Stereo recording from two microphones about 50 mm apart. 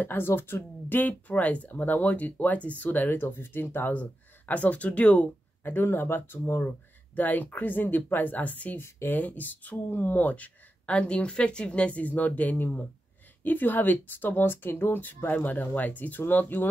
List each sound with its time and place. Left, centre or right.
0.0 s speech: left
3.9 s speech: left
5.6 s speech: left
7.2 s speech: left
15.3 s speech: left